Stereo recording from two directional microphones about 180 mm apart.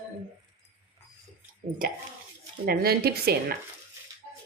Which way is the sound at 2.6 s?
55° right (ahead or behind).